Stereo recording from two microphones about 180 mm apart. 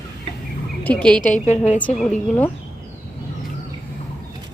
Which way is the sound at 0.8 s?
5° left (ahead or behind).